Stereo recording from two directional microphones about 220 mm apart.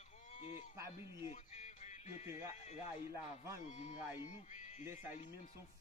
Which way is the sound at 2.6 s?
30° left (ahead or behind).